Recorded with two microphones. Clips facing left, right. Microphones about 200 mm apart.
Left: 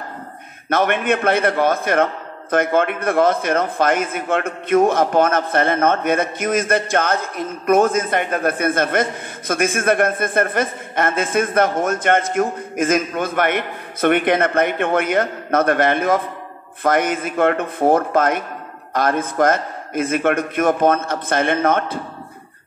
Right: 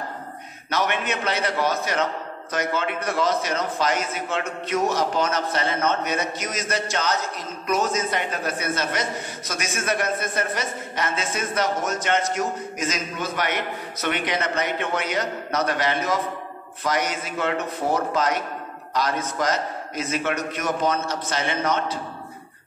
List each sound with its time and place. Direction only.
0.7 s a man's voice: 55° left (ahead or behind)